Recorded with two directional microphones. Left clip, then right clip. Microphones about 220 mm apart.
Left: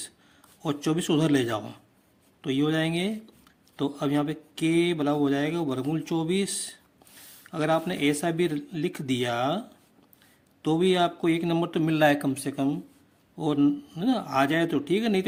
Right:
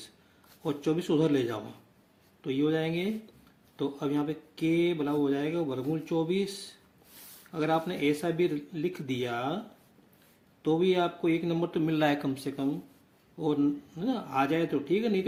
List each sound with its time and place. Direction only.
0.6 s speech: 45° left (ahead or behind)
7.5 s speech: 40° left (ahead or behind)
10.6 s speech: 45° left (ahead or behind)